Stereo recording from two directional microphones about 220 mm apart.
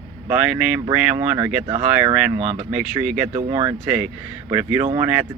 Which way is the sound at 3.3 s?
30° right (ahead or behind).